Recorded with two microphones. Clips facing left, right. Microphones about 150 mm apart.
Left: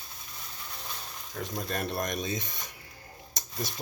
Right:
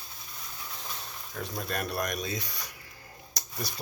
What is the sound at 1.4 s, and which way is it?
Speech, 15° left (ahead or behind).